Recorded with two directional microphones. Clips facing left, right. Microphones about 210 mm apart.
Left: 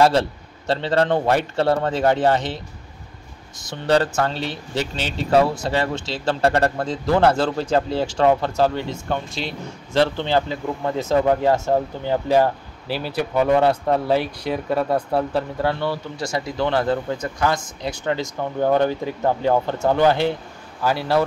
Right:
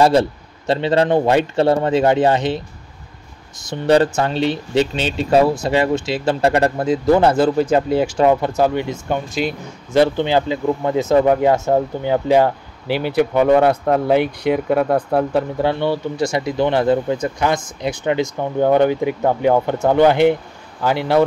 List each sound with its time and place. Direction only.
0.0 s speech: 20° right (ahead or behind)
3.7 s speech: 20° right (ahead or behind)